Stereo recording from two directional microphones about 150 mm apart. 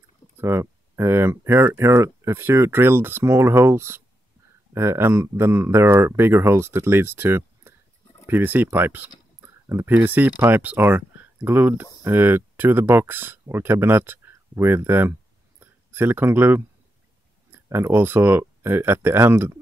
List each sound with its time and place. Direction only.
0.4 s speech: 15° right (ahead or behind)